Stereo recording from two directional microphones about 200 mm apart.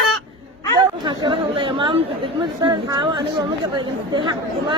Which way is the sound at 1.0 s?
25° right (ahead or behind).